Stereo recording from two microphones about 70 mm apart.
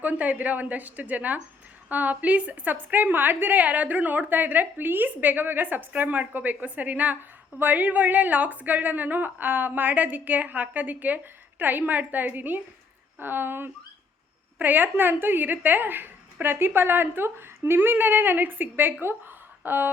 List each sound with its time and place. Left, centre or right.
0.0 s a woman's voice: right